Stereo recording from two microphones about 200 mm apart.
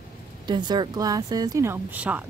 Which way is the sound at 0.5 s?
20° right (ahead or behind).